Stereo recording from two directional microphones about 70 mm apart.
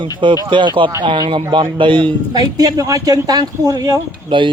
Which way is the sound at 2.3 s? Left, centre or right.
Right.